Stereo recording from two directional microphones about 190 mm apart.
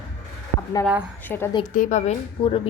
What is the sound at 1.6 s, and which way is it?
Speech, 40° left (ahead or behind).